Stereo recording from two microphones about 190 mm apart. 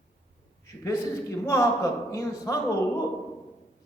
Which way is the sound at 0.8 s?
15° left (ahead or behind).